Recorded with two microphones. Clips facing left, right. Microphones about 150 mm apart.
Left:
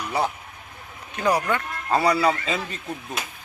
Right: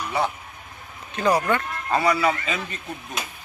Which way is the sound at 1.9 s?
35° left (ahead or behind).